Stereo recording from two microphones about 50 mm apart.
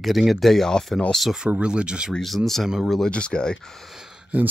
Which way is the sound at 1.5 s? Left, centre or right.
Right.